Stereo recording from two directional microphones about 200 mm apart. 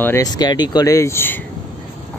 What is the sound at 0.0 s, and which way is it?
Speech, 15° left (ahead or behind).